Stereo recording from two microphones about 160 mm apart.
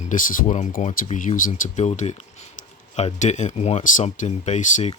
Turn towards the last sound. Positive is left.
turn(degrees=50)  # may be behind; listen again after turning